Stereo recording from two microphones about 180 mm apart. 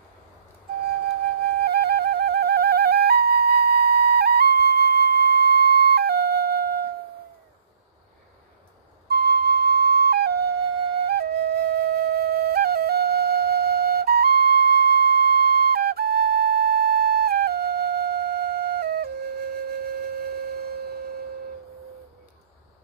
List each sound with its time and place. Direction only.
1.6 s music: 60° right (ahead or behind)
9.1 s flute: 60° right (ahead or behind)